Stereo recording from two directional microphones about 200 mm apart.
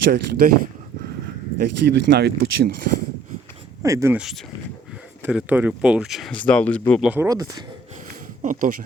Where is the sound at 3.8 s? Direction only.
15° right (ahead or behind); by 7.1 s 5° left (ahead or behind).